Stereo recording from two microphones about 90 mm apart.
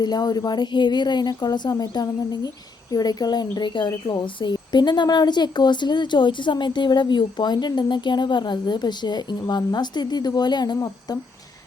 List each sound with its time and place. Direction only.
0.0 s speech: 50° left (ahead or behind)